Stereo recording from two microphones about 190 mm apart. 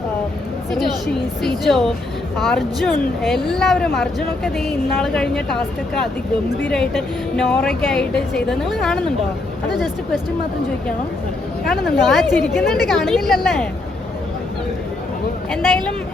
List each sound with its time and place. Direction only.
0.7 s speech: centre (ahead or behind)
11.7 s speech: centre (ahead or behind)